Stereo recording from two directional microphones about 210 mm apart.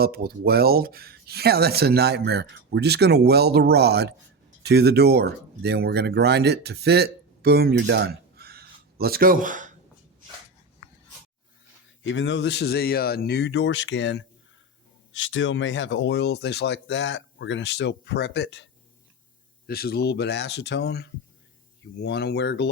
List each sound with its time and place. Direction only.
0.0 s speech: 45° right (ahead or behind)
12.0 s speech: 60° left (ahead or behind)